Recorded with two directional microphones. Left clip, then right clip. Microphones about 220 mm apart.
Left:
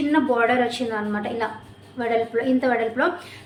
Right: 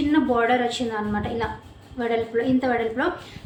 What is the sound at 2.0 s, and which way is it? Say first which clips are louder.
A woman's voice: left 1 dB; 5° left (ahead or behind).